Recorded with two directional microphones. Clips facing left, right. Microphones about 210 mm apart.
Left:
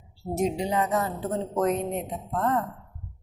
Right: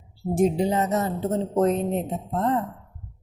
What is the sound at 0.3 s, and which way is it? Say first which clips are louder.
Speech: right 5 dB; 50° right (ahead or behind).